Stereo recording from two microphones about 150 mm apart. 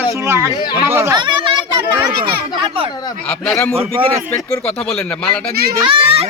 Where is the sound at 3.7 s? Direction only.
40° right (ahead or behind).